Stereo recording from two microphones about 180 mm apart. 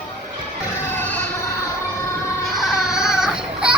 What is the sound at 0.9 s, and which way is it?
Emergency vehicle, 10° left (ahead or behind).